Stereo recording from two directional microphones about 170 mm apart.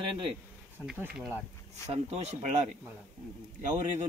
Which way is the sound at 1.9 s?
40° right (ahead or behind).